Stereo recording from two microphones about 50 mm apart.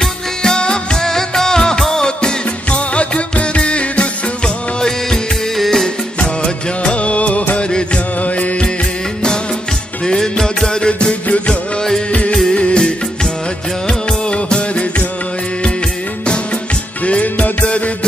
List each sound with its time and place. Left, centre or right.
0.0 s music of bollywood: centre
4.8 s music: centre
6.1 s music: left
10.0 s music: centre
17.0 s music: left